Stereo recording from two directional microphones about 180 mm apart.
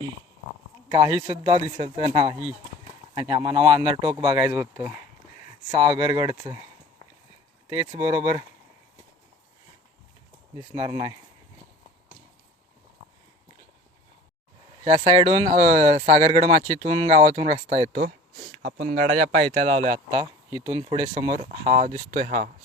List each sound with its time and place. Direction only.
0.9 s speech: 30° right (ahead or behind)
7.7 s speech: 30° right (ahead or behind)
10.8 s speech: 30° right (ahead or behind)
14.8 s speech: 35° right (ahead or behind)
17.9 s speech: 50° right (ahead or behind)